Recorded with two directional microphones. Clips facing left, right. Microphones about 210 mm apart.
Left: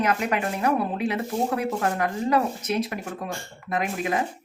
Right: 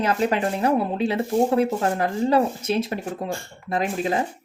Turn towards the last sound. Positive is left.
turn(degrees=-30)  # may be behind; listen again after turning